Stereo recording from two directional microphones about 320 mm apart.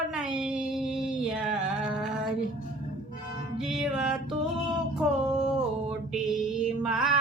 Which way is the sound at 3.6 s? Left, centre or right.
Centre.